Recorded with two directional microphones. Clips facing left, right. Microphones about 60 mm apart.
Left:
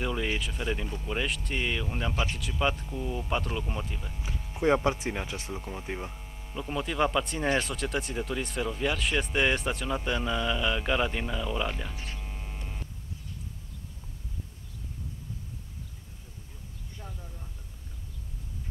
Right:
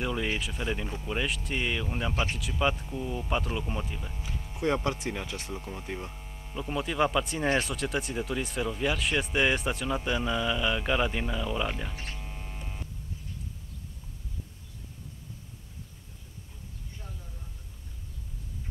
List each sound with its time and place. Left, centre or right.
0.0 s speech: centre
4.6 s speech: centre
5.5 s speech: centre
6.1 s speech: centre
12.2 s mains hum: centre